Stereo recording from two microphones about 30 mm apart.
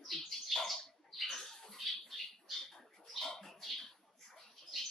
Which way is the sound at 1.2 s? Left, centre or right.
Centre.